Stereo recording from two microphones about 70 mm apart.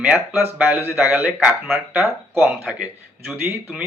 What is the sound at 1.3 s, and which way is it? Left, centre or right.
Speech, centre.